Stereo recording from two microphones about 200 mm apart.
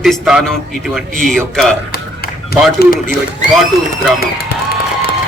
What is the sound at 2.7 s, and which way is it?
Speech, 50° left (ahead or behind).